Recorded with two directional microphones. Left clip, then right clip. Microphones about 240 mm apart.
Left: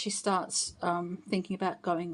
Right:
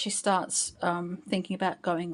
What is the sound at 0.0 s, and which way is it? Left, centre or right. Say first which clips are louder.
A woman's voice: right 3 dB; centre.